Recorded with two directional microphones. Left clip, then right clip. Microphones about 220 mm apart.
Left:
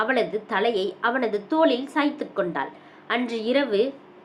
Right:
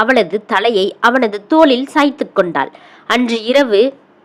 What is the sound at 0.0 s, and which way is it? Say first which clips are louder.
A woman's voice: right 11 dB; 45° right (ahead or behind).